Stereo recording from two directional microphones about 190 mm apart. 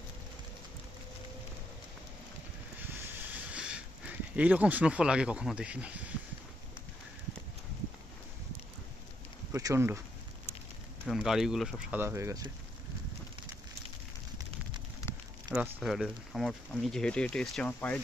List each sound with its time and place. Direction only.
3.2 s train: 5° right (ahead or behind)
4.4 s speech: 5° right (ahead or behind)
9.5 s speech: 15° right (ahead or behind)
11.1 s speech: centre (ahead or behind)
12.0 s speech: 15° right (ahead or behind)
15.5 s speech: 5° right (ahead or behind)